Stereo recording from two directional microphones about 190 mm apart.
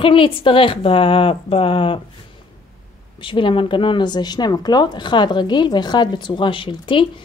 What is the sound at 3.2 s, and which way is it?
Speech, 25° left (ahead or behind).